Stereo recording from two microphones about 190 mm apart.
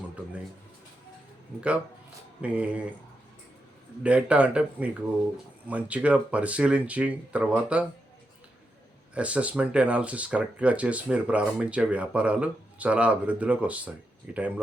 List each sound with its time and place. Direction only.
2.4 s speech: 5° right (ahead or behind)
4.0 s speech: 5° right (ahead or behind)
9.1 s speech: 5° right (ahead or behind)